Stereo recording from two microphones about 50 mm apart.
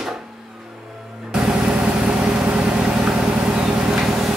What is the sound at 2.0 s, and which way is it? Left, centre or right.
Vehicle, centre.